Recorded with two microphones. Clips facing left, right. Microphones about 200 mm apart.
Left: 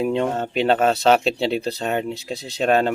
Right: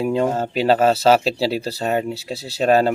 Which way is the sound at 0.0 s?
5° right (ahead or behind).